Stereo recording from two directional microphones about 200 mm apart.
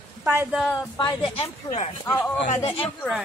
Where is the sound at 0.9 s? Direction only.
25° left (ahead or behind).